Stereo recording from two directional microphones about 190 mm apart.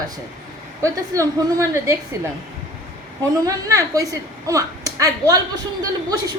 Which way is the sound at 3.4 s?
15° right (ahead or behind).